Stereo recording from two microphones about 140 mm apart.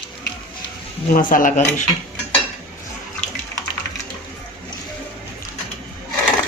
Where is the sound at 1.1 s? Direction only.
80° left.